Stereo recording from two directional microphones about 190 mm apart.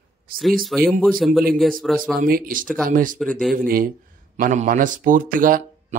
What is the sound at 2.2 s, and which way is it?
A man's voice, 50° right (ahead or behind).